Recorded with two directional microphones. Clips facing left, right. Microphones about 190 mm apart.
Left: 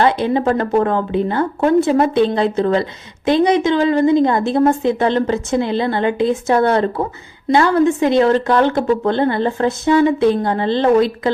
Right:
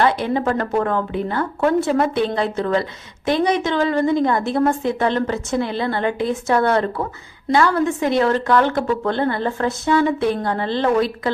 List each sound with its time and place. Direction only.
0.0 s a woman's voice: 25° left (ahead or behind)